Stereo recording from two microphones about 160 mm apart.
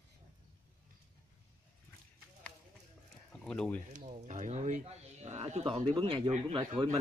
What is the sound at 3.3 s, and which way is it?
Speech, 5° left (ahead or behind).